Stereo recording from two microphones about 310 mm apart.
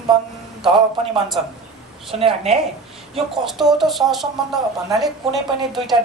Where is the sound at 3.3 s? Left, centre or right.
Centre.